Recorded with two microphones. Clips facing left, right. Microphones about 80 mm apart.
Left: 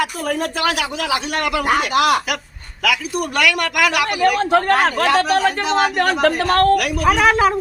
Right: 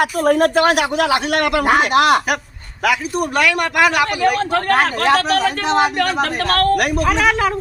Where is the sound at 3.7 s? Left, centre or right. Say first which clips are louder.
Right 3 dB; right.